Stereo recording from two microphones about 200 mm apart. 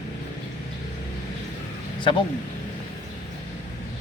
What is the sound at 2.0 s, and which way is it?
Speech, 25° left (ahead or behind).